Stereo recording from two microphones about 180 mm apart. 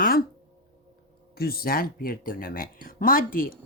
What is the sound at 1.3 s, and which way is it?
Speech, 55° left (ahead or behind).